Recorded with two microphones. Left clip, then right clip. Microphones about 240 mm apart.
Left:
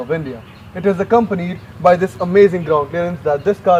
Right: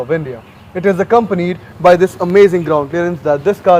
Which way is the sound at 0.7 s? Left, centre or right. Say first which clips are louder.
Right 3 dB; right.